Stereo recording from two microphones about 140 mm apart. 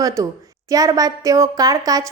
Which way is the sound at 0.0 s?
25° right (ahead or behind).